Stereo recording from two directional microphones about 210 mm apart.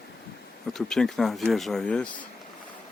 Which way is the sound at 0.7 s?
Centre (ahead or behind).